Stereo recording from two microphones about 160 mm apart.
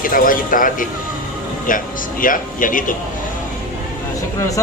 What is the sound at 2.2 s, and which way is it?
Speech, 55° left (ahead or behind).